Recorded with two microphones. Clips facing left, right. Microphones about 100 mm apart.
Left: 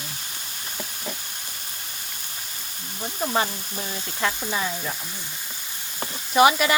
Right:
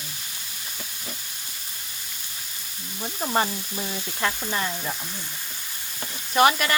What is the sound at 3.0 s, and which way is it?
Speech, centre (ahead or behind).